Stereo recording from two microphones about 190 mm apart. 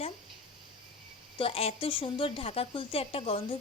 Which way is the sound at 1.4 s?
30° left (ahead or behind).